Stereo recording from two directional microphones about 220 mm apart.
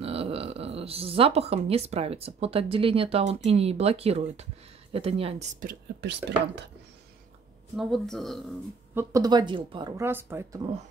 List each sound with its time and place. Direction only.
0.0 s speech: 25° right (ahead or behind); by 6.6 s 50° right (ahead or behind)
7.7 s speech: centre (ahead or behind)
8.9 s speech: 15° right (ahead or behind)